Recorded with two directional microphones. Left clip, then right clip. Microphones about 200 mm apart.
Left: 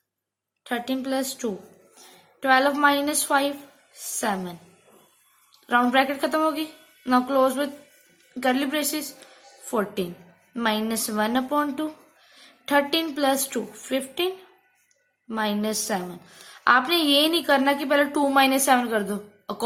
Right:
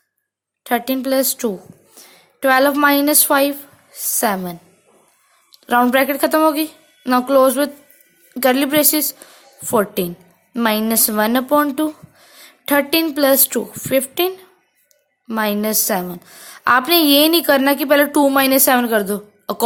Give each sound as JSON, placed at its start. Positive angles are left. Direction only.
{"t": 0.6, "sound": "a woman's voice", "side_deg": -50}